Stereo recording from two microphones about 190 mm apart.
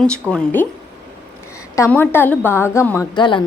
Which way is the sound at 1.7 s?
15° left (ahead or behind).